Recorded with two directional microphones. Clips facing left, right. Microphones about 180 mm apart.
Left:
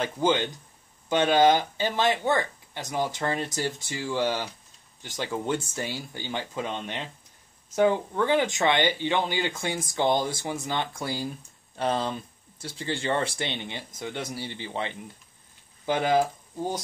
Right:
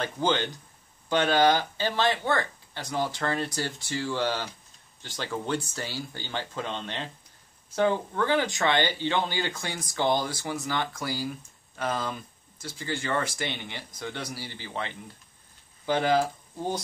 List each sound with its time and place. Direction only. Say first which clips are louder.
0.0 s speech: left 2 dB; 15° left (ahead or behind)
13.4 s speech: left 2 dB; 20° left (ahead or behind)